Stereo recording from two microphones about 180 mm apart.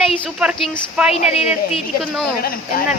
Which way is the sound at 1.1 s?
35° left (ahead or behind).